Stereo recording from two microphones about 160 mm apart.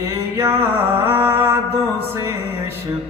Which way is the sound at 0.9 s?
15° right (ahead or behind).